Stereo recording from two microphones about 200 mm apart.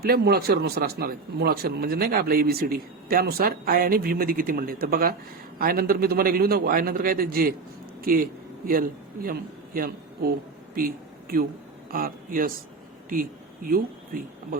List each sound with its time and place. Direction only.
0.0 s a man's voice: 50° right (ahead or behind)